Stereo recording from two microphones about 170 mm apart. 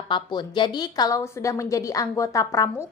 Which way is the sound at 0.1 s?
25° left (ahead or behind).